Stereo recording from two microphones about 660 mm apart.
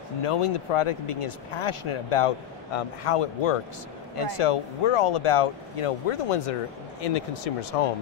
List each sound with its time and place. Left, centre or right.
0.2 s speech: left